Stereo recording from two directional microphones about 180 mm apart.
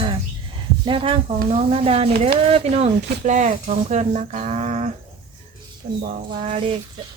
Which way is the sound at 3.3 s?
40° right (ahead or behind).